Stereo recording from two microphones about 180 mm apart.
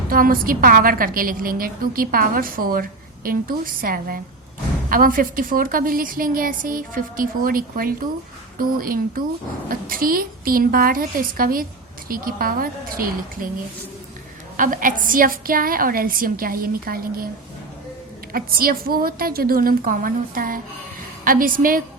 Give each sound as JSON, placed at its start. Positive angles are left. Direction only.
{"t": 0.1, "sound": "a woman's voice", "side_deg": -50}
{"t": 14.5, "sound": "a woman's voice", "side_deg": -50}
{"t": 18.3, "sound": "a woman's voice", "side_deg": -55}